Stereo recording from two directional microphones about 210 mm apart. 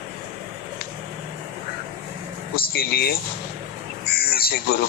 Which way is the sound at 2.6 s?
45° left (ahead or behind).